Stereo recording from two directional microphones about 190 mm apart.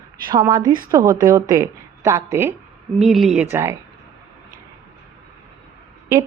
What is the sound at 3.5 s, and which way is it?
Speech, 15° right (ahead or behind).